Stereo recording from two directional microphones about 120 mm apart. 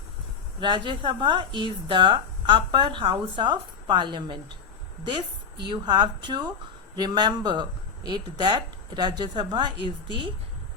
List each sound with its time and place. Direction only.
0.6 s a woman's voice: 40° right (ahead or behind)